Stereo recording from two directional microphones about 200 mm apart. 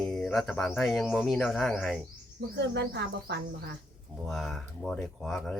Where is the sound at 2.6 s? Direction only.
55° right (ahead or behind).